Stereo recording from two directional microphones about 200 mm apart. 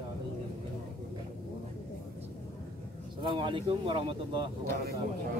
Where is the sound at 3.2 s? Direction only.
25° right (ahead or behind).